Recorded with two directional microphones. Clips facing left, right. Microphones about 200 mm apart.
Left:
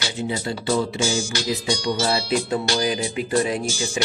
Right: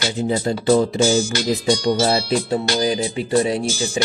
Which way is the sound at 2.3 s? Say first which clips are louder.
Right 2 dB; 35° right (ahead or behind).